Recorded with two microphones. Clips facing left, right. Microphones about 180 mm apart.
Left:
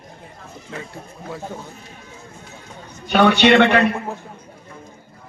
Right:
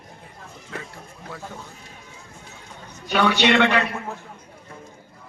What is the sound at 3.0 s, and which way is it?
Speech, 60° left (ahead or behind).